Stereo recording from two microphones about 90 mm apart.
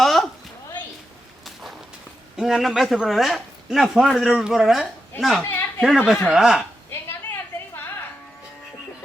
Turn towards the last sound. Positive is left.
turn(degrees=25)  # may be behind; listen again after turning